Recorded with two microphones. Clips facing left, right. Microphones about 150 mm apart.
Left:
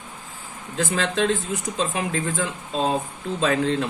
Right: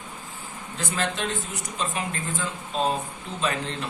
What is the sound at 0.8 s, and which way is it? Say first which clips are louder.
Speech: left 6 dB; 90° left.